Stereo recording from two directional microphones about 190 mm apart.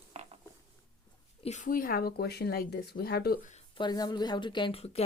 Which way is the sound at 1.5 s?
40° left (ahead or behind).